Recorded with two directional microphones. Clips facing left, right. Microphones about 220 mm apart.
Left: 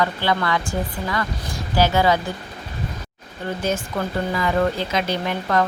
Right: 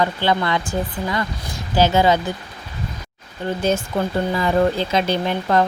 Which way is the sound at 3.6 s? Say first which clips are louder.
Right 4 dB; 25° right (ahead or behind).